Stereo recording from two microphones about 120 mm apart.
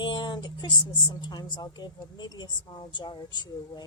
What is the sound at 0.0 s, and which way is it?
Speech, 40° left (ahead or behind).